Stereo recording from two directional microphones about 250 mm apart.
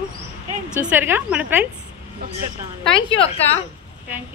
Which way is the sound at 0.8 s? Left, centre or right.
Centre.